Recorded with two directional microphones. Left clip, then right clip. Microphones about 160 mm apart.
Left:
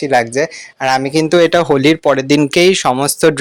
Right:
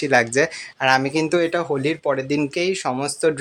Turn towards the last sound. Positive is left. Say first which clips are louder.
# left 9 dB
turn(degrees=50)  # may be behind; listen again after turning